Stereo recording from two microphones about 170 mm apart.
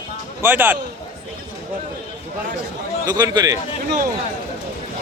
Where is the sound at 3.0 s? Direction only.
25° right (ahead or behind).